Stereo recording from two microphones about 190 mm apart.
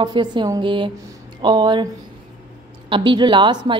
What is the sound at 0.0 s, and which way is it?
A woman's voice, 25° right (ahead or behind).